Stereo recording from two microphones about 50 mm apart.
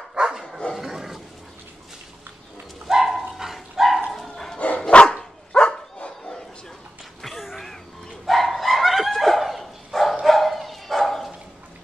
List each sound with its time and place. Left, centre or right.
0.1 s dog: centre
0.7 s wild animals: centre
2.9 s dog: centre
4.6 s dog: left
4.8 s dog: centre
7.2 s a sound: centre
8.3 s dog: centre